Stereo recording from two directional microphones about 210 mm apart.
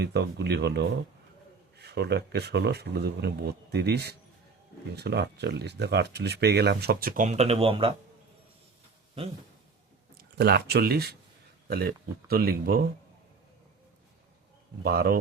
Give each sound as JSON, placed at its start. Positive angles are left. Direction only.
{"t": 0.0, "sound": "speech", "side_deg": -50}
{"t": 10.2, "sound": "speech", "side_deg": -50}
{"t": 14.8, "sound": "speech", "side_deg": -45}